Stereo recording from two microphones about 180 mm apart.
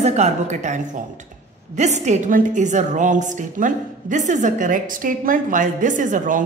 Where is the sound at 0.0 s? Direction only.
40° right (ahead or behind).